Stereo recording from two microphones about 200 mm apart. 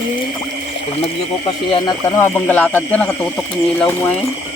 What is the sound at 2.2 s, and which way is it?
Speech, 10° left (ahead or behind).